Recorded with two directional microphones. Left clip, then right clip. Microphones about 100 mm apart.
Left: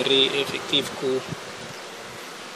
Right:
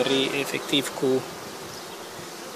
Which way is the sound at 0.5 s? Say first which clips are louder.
Left 1 dB; 75° right (ahead or behind).